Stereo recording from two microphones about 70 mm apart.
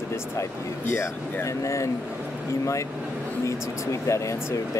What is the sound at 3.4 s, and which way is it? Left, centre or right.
Speech, left.